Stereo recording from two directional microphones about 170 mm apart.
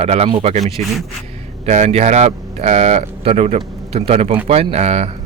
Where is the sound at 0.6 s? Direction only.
Centre (ahead or behind).